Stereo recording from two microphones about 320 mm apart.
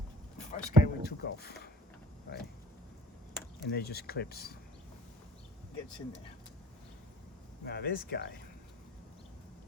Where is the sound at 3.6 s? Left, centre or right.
Left.